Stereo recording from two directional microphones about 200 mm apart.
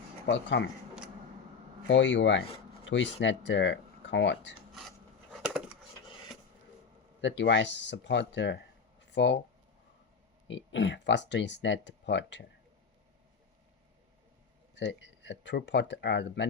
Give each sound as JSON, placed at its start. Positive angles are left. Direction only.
{"t": 0.3, "sound": "speech", "side_deg": 65}
{"t": 1.9, "sound": "speech", "side_deg": 65}
{"t": 4.7, "sound": "wood", "side_deg": 0}
{"t": 7.2, "sound": "speech", "side_deg": 65}
{"t": 10.5, "sound": "speech", "side_deg": 65}
{"t": 14.8, "sound": "speech", "side_deg": 60}